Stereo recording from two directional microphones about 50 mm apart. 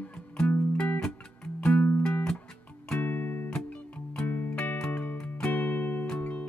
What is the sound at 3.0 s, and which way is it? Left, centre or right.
Music, left.